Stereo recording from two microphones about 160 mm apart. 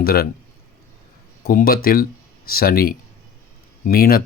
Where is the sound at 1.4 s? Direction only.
65° left (ahead or behind).